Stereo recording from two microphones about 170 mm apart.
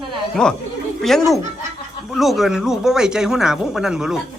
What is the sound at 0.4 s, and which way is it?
Speech, 5° left (ahead or behind).